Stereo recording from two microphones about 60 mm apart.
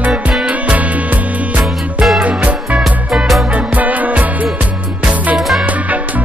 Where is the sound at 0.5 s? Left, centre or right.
Right.